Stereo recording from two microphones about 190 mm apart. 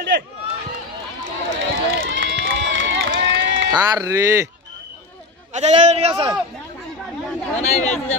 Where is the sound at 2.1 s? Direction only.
80° right.